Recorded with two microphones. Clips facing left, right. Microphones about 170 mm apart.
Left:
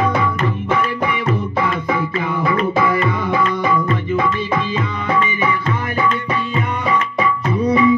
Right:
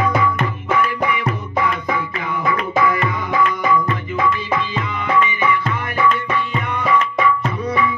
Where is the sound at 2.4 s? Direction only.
30° left (ahead or behind).